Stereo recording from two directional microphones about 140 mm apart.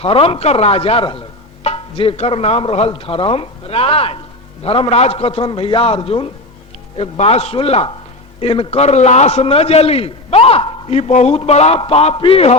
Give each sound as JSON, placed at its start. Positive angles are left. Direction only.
{"t": 0.0, "sound": "a man's voice", "side_deg": 40}